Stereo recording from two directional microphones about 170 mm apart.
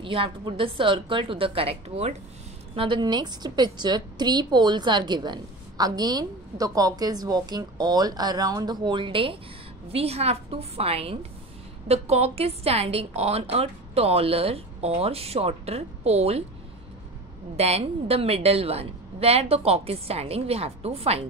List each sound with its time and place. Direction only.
0.0 s a woman's voice: 30° right (ahead or behind)
17.6 s a woman's voice: 35° right (ahead or behind)